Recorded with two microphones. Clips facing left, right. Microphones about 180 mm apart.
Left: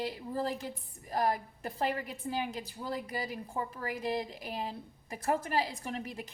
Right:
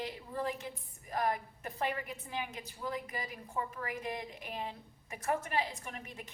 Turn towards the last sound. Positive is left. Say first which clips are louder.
# left 7 dB
turn(degrees=35)  # may be behind; listen again after turning